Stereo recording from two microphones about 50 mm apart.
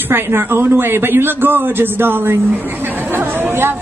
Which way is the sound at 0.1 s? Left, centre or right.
Right.